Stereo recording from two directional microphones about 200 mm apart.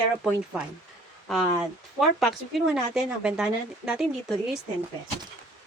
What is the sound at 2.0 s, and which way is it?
Speech, centre (ahead or behind).